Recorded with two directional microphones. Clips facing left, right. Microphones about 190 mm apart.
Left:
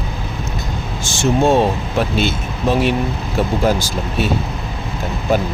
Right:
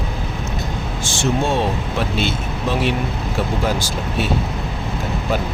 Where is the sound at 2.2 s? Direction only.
45° left (ahead or behind).